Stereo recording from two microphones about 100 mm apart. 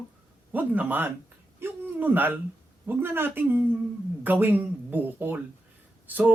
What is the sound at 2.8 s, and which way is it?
Speech, 20° right (ahead or behind).